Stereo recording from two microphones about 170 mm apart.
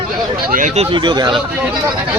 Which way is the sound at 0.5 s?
45° right (ahead or behind).